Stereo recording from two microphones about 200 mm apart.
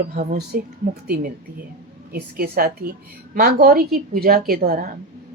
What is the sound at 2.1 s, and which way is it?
A woman's voice, 50° right (ahead or behind).